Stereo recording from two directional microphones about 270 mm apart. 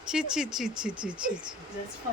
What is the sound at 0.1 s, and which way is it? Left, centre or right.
Speech, centre.